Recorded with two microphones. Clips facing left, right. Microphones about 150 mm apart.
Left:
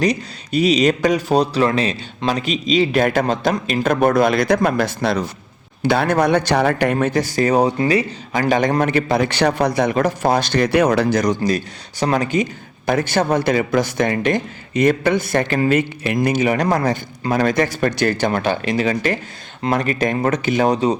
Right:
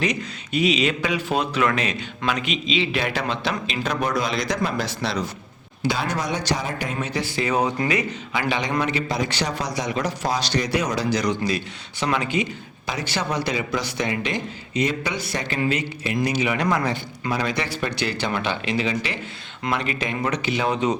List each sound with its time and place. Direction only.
0.0 s speech: 35° left (ahead or behind)
8.3 s a man's voice: 45° left (ahead or behind)